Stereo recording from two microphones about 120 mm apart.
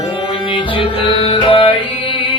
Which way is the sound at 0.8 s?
45° left (ahead or behind).